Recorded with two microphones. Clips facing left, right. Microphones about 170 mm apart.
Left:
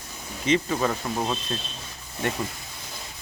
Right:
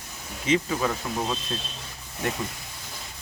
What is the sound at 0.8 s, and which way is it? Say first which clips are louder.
Speech: left 1 dB; 10° left (ahead or behind).